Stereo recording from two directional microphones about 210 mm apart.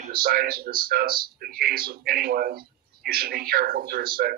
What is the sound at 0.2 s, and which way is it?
Speech, 45° right (ahead or behind).